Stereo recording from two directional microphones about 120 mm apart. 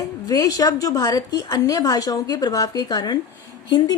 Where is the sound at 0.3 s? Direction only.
30° left (ahead or behind).